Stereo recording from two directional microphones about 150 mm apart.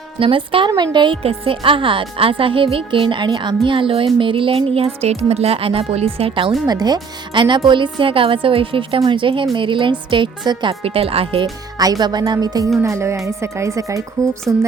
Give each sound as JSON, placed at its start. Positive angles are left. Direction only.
{"t": 0.2, "sound": "speech", "side_deg": -35}
{"t": 6.7, "sound": "speech", "side_deg": -25}
{"t": 11.8, "sound": "speech", "side_deg": -25}